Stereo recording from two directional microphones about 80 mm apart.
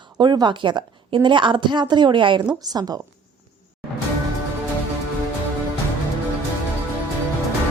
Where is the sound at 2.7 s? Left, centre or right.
Right.